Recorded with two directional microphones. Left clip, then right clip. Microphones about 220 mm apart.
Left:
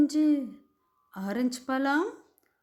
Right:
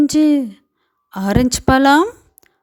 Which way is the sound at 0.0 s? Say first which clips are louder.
Right 11 dB; 40° right (ahead or behind).